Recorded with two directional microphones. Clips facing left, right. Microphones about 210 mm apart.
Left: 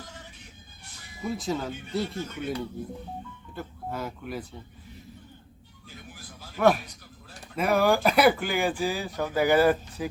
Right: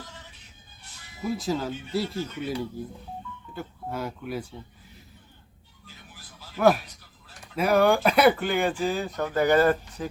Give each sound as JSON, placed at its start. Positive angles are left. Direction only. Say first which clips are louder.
{"t": 1.2, "sound": "speech", "louder": "right 2 dB", "side_deg": 0}
{"t": 6.6, "sound": "speech", "louder": "right 1 dB", "side_deg": 0}